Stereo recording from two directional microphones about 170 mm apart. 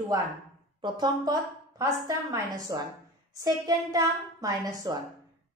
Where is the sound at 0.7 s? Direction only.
25° right (ahead or behind).